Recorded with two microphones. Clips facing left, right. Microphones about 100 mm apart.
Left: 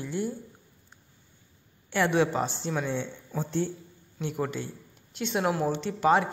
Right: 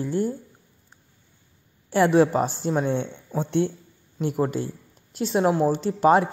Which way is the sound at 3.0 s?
60° right (ahead or behind).